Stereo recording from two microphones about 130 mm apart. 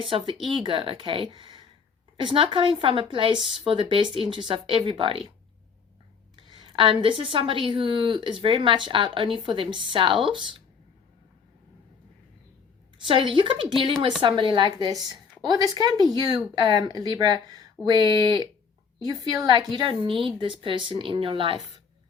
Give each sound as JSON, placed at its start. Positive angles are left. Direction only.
{"t": 0.0, "sound": "a woman's voice", "side_deg": -40}
{"t": 6.6, "sound": "a woman's voice", "side_deg": -40}
{"t": 13.1, "sound": "a woman's voice", "side_deg": -40}